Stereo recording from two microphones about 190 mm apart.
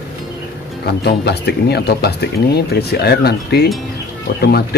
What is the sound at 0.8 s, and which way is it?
Speech, 60° left (ahead or behind).